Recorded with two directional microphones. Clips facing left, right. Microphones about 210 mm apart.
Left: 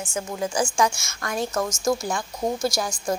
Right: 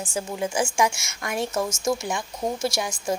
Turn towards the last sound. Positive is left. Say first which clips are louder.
# left 1 dB
turn(degrees=-25)  # may be behind; listen again after turning